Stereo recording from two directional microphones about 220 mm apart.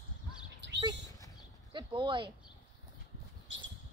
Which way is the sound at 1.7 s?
20° right (ahead or behind).